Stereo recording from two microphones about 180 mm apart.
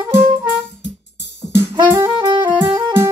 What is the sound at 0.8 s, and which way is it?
Music, 75° left (ahead or behind).